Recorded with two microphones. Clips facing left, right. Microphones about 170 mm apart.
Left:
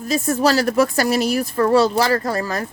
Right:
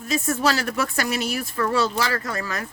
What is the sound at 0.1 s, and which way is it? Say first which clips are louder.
Speech: left 5 dB; 35° left (ahead or behind).